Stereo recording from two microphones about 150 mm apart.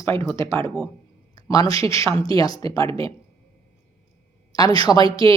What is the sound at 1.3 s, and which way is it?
A woman's voice, 25° left (ahead or behind).